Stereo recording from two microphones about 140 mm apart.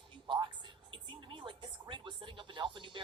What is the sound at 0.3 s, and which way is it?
A woman's voice, 35° right (ahead or behind).